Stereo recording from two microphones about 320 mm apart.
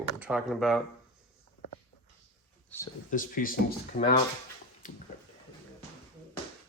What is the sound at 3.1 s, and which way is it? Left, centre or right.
Speech, left.